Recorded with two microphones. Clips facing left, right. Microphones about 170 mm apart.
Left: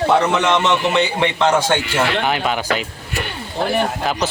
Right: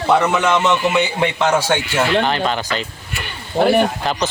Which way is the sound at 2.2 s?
10° left (ahead or behind).